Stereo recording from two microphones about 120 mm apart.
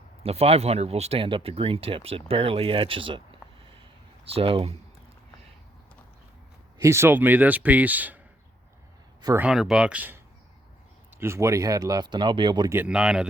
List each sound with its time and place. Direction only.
0.2 s speech: 55° right (ahead or behind)
4.3 s speech: 50° right (ahead or behind)
6.7 s speech: 25° right (ahead or behind)
9.4 s speech: 5° right (ahead or behind)
11.2 s speech: 20° right (ahead or behind)
12.7 s speech: 10° right (ahead or behind)